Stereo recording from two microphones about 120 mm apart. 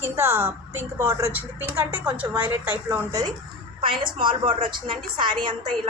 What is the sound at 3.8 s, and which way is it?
A woman's voice, 40° right (ahead or behind).